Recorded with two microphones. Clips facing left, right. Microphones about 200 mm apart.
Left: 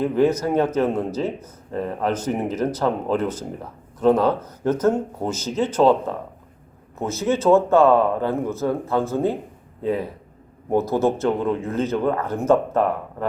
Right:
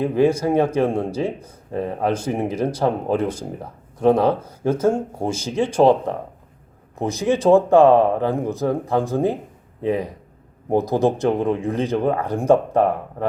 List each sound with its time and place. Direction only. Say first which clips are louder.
0.0 s speech: right 1 dB; 10° right (ahead or behind)
7.0 s speech: right 2 dB; 15° right (ahead or behind)